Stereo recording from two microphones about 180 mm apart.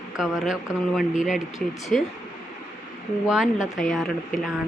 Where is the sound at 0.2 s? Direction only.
5° right (ahead or behind).